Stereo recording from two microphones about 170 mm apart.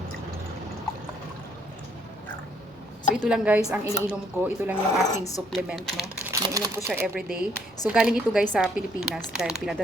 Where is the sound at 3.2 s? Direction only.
5° right (ahead or behind).